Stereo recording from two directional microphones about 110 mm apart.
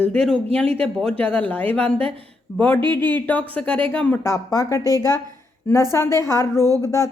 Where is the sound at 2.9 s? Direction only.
15° left (ahead or behind).